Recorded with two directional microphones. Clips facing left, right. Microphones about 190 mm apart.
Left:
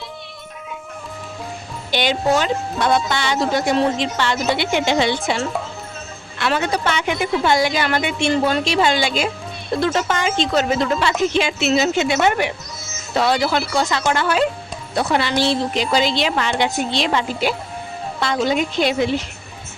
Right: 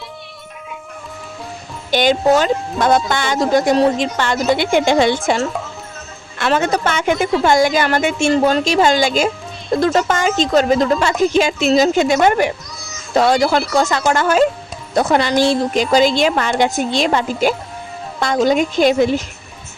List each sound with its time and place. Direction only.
1.9 s speech: 45° right (ahead or behind)
6.4 s speech: 45° right (ahead or behind)